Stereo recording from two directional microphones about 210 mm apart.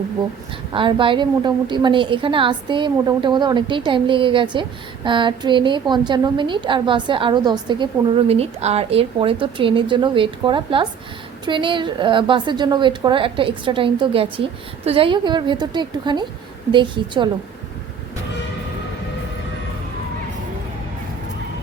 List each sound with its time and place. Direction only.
0.7 s a woman's voice: 25° right (ahead or behind)